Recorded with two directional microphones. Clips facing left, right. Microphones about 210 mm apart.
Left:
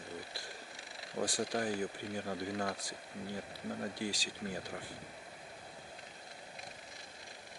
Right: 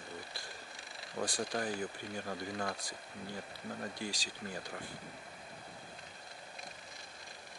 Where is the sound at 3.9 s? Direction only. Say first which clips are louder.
Left 3 dB; 5° left (ahead or behind).